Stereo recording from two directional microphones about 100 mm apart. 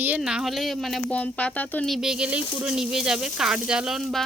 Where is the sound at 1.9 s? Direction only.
5° right (ahead or behind).